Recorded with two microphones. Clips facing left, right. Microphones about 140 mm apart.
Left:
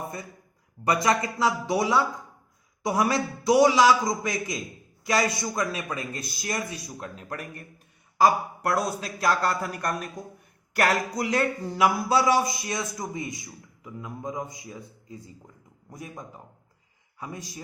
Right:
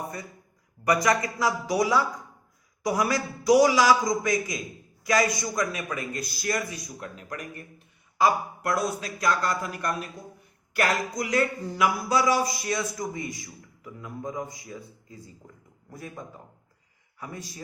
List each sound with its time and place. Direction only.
0.9 s a man's voice: 25° left (ahead or behind)
15.9 s a man's voice: 20° left (ahead or behind)